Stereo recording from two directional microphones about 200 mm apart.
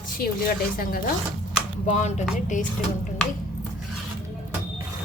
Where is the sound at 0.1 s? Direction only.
45° left (ahead or behind).